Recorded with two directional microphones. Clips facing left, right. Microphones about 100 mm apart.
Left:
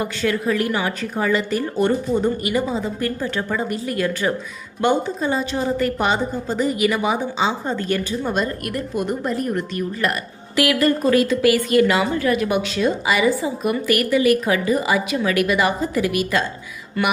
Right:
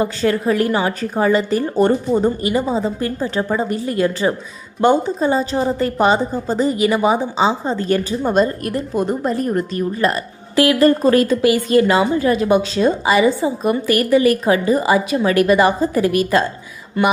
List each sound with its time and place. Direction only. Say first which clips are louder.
0.0 s a woman's voice: right 4 dB; 35° right (ahead or behind)
11.4 s a woman's voice: right 2 dB; 30° right (ahead or behind)
17.0 s a sound: right 5 dB; 20° right (ahead or behind)